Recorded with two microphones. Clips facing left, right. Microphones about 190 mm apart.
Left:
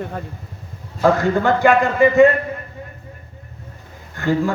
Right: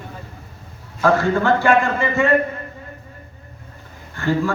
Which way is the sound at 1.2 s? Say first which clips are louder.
Left 2 dB; 15° left (ahead or behind).